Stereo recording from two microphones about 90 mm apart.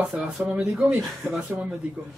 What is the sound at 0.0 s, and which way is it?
Speech, 15° right (ahead or behind).